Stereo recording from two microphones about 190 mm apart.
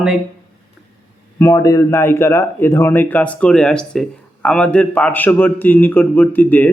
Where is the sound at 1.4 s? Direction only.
15° left (ahead or behind).